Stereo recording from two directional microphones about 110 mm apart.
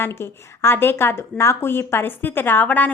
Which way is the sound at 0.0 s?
20° left (ahead or behind).